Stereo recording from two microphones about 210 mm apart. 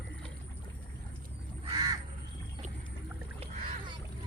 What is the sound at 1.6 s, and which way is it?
Crow, 25° right (ahead or behind).